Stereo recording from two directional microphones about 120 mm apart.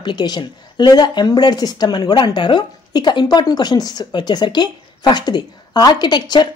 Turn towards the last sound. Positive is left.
turn(degrees=35)  # may be behind; listen again after turning